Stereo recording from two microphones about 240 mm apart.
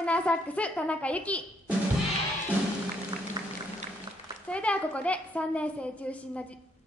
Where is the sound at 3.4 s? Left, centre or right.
Centre.